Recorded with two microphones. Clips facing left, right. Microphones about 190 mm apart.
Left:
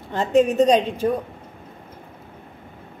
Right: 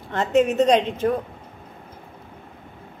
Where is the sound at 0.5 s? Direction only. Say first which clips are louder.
Left 1 dB; 10° left (ahead or behind).